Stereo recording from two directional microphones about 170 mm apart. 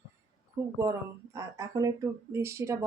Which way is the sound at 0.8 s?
20° right (ahead or behind).